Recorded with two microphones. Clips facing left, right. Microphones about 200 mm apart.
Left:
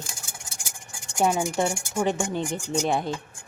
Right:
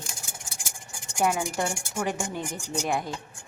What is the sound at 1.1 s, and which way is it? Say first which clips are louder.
A woman's voice: left 3 dB; 25° left (ahead or behind).